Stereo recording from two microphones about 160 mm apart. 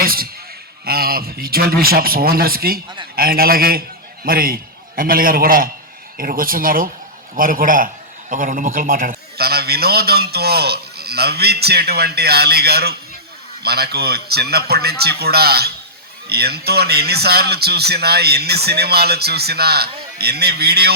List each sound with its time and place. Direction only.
0.0 s a man's voice: 65° right (ahead or behind); by 20.9 s 85° right